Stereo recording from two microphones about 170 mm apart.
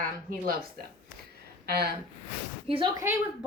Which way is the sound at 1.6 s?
70° right (ahead or behind).